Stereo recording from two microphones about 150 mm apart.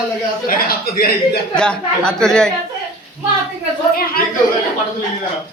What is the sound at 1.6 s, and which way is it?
Speech, 5° left (ahead or behind).